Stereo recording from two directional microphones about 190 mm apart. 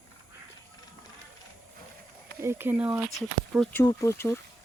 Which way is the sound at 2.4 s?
10° right (ahead or behind).